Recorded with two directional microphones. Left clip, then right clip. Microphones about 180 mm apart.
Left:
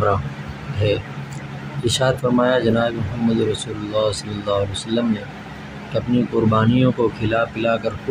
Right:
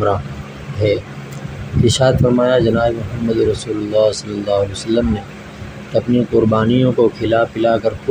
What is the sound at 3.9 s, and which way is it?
Speech, 15° right (ahead or behind).